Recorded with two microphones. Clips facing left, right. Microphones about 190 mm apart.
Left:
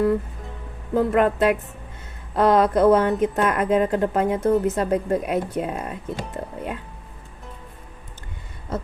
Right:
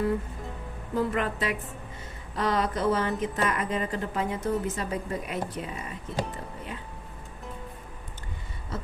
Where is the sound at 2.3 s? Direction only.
55° left (ahead or behind).